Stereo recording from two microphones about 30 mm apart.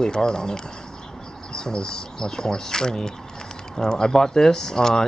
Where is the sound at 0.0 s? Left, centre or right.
Left.